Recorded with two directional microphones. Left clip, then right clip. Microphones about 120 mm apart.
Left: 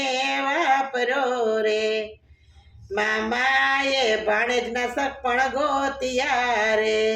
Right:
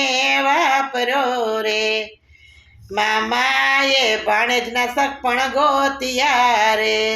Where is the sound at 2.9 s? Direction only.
40° left (ahead or behind).